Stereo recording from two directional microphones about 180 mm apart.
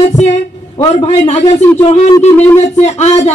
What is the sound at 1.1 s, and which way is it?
A man's voice, 40° left (ahead or behind).